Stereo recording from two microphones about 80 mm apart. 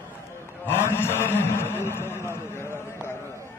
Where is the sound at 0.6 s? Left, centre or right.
Left.